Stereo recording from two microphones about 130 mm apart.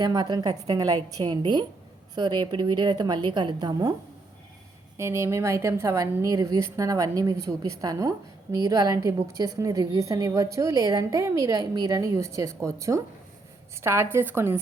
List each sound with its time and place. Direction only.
0.0 s a woman's voice: 30° right (ahead or behind)
4.9 s a woman's voice: 20° right (ahead or behind)